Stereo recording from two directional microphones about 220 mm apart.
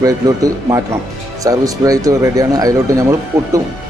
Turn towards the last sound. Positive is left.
turn(degrees=-15)  # may be behind; listen again after turning